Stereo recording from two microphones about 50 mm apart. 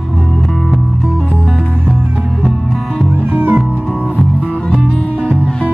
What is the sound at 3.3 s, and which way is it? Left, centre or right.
Music, right.